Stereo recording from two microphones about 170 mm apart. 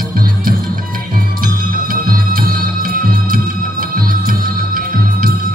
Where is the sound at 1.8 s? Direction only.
55° right (ahead or behind).